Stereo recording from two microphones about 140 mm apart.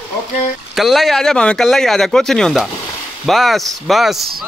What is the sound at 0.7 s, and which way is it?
Speech, centre (ahead or behind).